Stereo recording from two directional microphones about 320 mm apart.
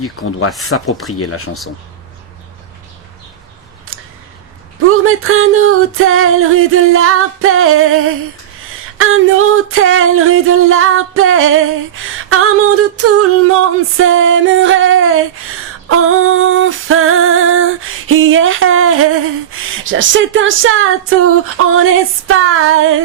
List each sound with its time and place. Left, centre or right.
0.0 s speech: left
0.5 s speech: centre
3.9 s a sound: right